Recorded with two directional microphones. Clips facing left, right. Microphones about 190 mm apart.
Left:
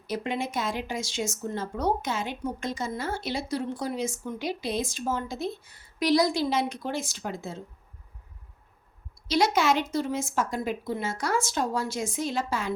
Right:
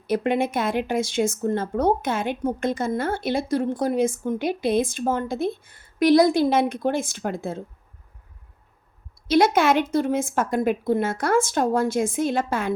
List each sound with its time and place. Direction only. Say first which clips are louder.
0.1 s speech: right 8 dB; 55° right (ahead or behind)
9.2 s speech: right 6 dB; 55° right (ahead or behind)